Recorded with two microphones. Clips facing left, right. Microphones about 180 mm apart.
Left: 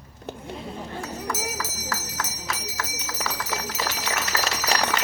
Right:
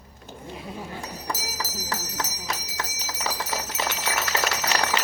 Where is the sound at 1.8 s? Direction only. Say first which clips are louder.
Even; 20° right (ahead or behind).